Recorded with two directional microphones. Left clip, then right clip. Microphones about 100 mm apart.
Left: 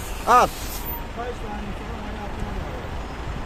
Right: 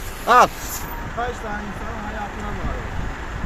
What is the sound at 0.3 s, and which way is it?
Speech, 15° left (ahead or behind).